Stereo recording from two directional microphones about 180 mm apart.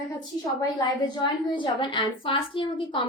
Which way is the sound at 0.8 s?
25° left (ahead or behind).